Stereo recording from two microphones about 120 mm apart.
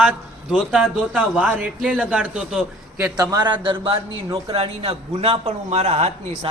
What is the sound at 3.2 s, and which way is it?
A man's voice, 35° right (ahead or behind).